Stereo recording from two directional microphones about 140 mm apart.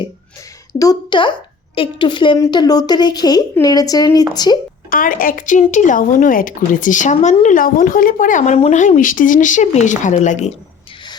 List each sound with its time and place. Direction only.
0.7 s a woman's voice: 25° left (ahead or behind)
4.9 s speech: 85° left; by 7.3 s 60° left (ahead or behind)
7.4 s a woman's voice: 85° left; by 10.5 s 60° left (ahead or behind)